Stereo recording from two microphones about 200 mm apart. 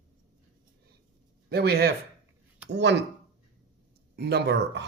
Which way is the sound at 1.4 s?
55° right (ahead or behind).